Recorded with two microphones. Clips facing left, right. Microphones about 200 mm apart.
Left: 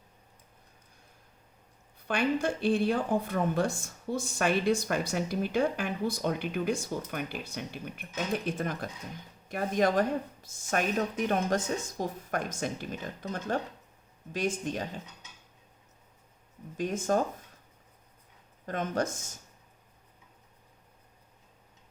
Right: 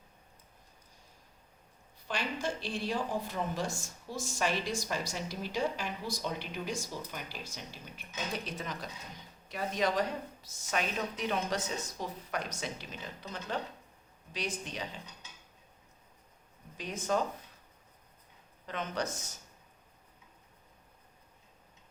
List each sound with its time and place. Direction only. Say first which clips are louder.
2.0 s a woman's voice: left 7 dB; 55° left (ahead or behind)
16.7 s a woman's voice: left 5 dB; 50° left (ahead or behind)
18.6 s a woman's voice: left 5 dB; 50° left (ahead or behind)